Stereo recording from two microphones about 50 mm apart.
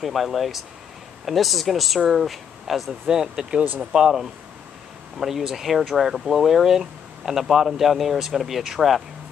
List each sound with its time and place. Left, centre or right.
0.0 s speech: centre
3.1 s speech: centre
5.2 s speech: centre